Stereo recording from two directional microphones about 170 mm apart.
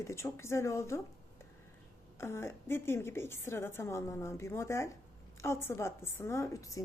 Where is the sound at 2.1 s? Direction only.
15° left (ahead or behind).